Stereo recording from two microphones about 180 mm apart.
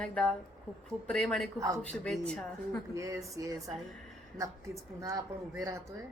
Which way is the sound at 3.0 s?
15° right (ahead or behind).